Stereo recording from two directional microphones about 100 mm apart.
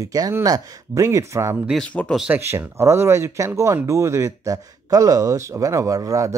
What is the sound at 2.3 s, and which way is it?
Speech, 25° right (ahead or behind).